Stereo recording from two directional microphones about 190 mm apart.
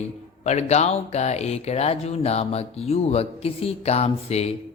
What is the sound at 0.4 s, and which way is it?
Speech, 35° left (ahead or behind).